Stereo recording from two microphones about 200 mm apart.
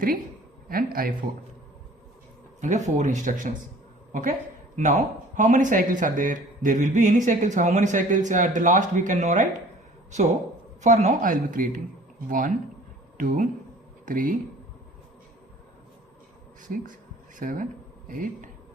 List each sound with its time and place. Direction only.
0.7 s speech: 45° right (ahead or behind)
2.6 s a woman's voice: 35° right (ahead or behind)
10.8 s speech: 35° right (ahead or behind)
16.6 s a sound: 40° right (ahead or behind)
18.1 s speech: 45° right (ahead or behind)